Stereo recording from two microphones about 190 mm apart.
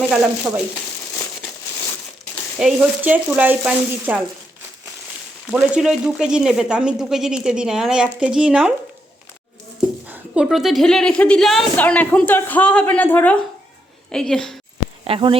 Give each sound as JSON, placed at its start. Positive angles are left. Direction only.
{"t": 0.1, "sound": "a woman's voice", "side_deg": -5}
{"t": 2.3, "sound": "speech", "side_deg": 0}
{"t": 5.5, "sound": "a woman's voice", "side_deg": 0}
{"t": 10.1, "sound": "a woman's voice", "side_deg": -5}
{"t": 15.0, "sound": "speech", "side_deg": -30}